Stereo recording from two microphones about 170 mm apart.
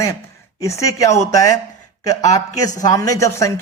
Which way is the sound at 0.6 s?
20° left (ahead or behind).